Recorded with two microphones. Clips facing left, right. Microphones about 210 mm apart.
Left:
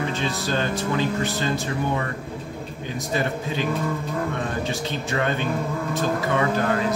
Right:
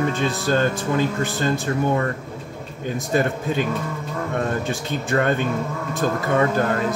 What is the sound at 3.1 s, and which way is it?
Speech, 50° right (ahead or behind).